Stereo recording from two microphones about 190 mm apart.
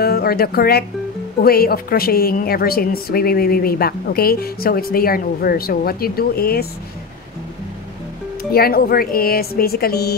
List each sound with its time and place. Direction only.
0.0 s a woman's voice: 55° left (ahead or behind)
8.5 s a woman's voice: 50° left (ahead or behind)